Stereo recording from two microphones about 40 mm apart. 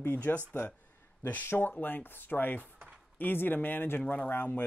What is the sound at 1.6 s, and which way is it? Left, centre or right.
Speech, left.